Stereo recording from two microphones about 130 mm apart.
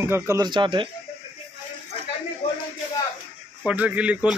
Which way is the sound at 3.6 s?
10° right (ahead or behind).